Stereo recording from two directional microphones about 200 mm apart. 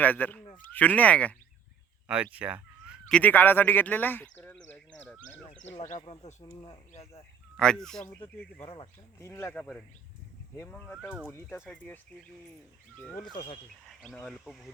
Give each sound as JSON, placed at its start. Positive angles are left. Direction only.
{"t": 0.0, "sound": "speech", "side_deg": 10}
{"t": 2.0, "sound": "a sound", "side_deg": -5}
{"t": 3.2, "sound": "speech", "side_deg": 10}
{"t": 4.9, "sound": "a sound", "side_deg": 5}
{"t": 5.7, "sound": "speech", "side_deg": 35}
{"t": 7.5, "sound": "speech", "side_deg": 5}
{"t": 8.6, "sound": "speech", "side_deg": 25}
{"t": 9.1, "sound": "speech", "side_deg": 15}
{"t": 13.8, "sound": "speech", "side_deg": 5}